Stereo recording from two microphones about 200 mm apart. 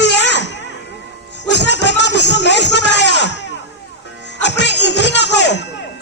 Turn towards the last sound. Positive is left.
turn(degrees=60)  # may be behind; listen again after turning